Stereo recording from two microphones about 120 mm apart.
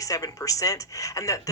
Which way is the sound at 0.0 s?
30° left (ahead or behind).